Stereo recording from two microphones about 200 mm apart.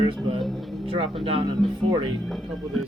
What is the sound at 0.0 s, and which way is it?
Speech, 25° right (ahead or behind).